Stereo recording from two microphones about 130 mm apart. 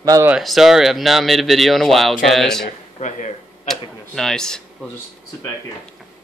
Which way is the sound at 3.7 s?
5° left (ahead or behind).